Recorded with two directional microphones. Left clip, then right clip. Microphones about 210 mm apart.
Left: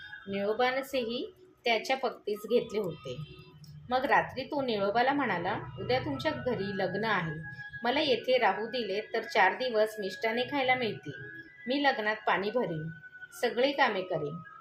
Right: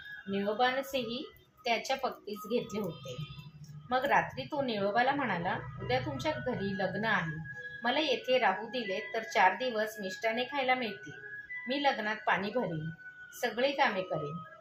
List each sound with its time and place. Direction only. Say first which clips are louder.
0.3 s a woman's voice: left 1 dB; 35° left (ahead or behind)
3.8 s a woman's voice: left 2 dB; 35° left (ahead or behind)